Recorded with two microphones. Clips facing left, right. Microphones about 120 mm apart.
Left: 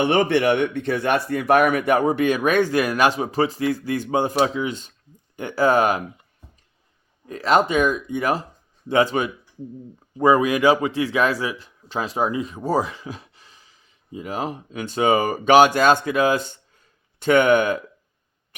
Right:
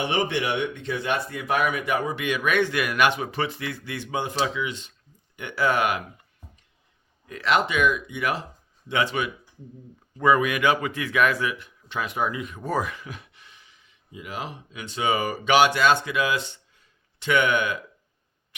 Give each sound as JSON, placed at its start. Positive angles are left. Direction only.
{"t": 0.0, "sound": "speech", "side_deg": 55}
{"t": 7.3, "sound": "a man's voice", "side_deg": 35}